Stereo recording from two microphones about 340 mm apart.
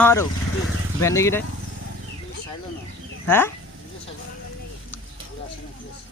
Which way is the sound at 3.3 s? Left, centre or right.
Centre.